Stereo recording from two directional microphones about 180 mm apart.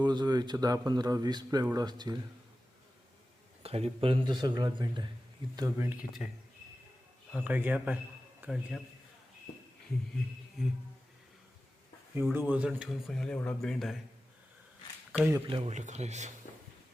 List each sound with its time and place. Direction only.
0.0 s speech: 25° right (ahead or behind)
3.6 s speech: 35° right (ahead or behind); by 6.2 s 10° right (ahead or behind)
7.3 s a man's voice: 10° right (ahead or behind)
12.1 s speech: 15° right (ahead or behind)
15.2 s speech: 10° right (ahead or behind)
15.4 s speech: 30° right (ahead or behind)